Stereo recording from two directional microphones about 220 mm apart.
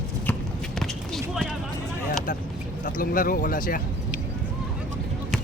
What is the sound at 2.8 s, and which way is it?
Speech, 40° left (ahead or behind).